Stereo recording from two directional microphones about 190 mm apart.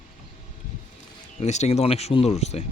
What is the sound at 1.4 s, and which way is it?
Speech, 35° left (ahead or behind).